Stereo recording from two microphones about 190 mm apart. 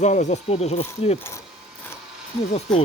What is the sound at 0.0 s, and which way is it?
Speech, 40° left (ahead or behind).